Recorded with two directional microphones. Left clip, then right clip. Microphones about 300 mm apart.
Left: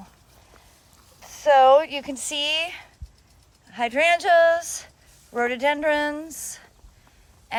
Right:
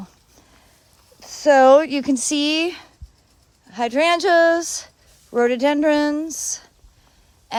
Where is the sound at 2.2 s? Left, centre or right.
Centre.